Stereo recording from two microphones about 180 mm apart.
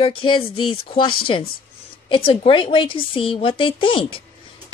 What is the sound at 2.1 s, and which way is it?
A woman's voice, 30° left (ahead or behind).